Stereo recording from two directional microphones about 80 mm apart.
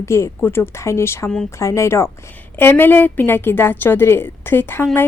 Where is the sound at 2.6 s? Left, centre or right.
Left.